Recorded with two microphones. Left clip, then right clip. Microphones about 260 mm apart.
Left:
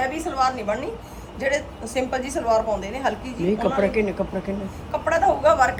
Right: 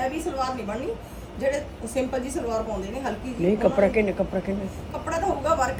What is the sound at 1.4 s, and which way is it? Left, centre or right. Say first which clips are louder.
A woman's voice: left 2 dB; centre.